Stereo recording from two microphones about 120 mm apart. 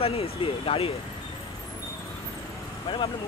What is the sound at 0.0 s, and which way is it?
Speech, 55° left (ahead or behind).